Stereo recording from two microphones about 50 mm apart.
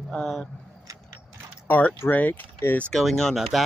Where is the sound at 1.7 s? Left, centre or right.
Left.